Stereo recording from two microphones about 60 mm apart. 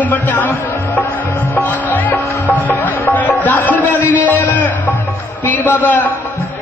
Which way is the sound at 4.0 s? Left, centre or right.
Right.